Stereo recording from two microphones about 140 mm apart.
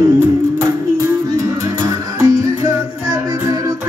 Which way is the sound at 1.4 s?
20° right (ahead or behind).